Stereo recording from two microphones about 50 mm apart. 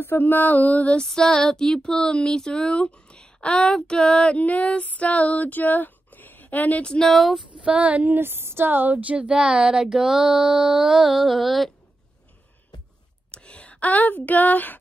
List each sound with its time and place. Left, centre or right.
0.0 s music: left
1.0 s speech: centre
4.4 s a sound: left
7.0 s speech: centre
7.5 s female singing: right
8.2 s speech: right; by 11.7 s centre
13.3 s speech: left